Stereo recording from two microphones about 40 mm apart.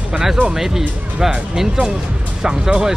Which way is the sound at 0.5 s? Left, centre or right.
Centre.